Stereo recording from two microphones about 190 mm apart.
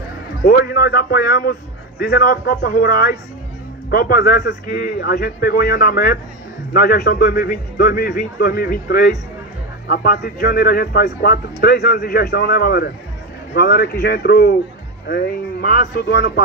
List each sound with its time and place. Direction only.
0.6 s a man's voice: 55° left (ahead or behind)